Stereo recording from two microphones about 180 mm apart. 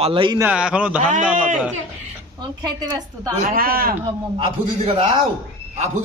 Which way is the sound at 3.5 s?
55° right (ahead or behind).